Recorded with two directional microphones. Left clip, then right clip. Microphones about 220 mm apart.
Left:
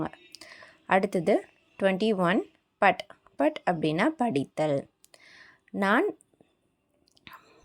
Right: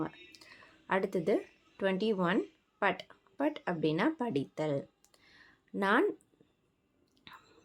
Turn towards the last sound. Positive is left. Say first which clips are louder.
# left 5 dB
turn(degrees=25)  # may be behind; listen again after turning